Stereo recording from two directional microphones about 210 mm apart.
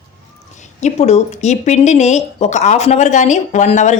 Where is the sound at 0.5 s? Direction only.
35° left (ahead or behind).